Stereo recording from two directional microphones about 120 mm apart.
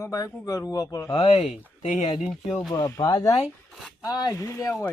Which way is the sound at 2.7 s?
25° left (ahead or behind).